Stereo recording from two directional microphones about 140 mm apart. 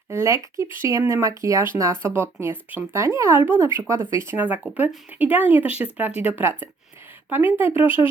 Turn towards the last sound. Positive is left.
turn(degrees=-15)  # may be behind; listen again after turning